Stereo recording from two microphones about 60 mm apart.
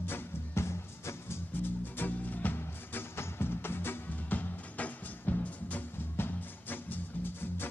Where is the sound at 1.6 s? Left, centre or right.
Left.